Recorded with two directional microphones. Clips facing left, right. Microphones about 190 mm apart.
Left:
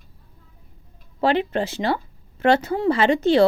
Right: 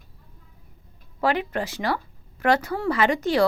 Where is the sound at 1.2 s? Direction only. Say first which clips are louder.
Left 4 dB; 25° left (ahead or behind).